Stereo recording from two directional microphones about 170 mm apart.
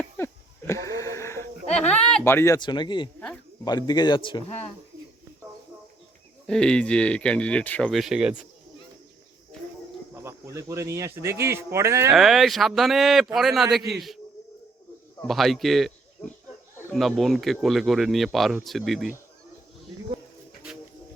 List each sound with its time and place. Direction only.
0.2 s wheeze: 15° left (ahead or behind)
0.7 s a sound: 20° left (ahead or behind)
2.6 s speech: 25° left (ahead or behind)
6.5 s speech: 5° left (ahead or behind)
10.2 s speech: 15° right (ahead or behind)
12.1 s speech: centre (ahead or behind)
15.2 s speech: centre (ahead or behind)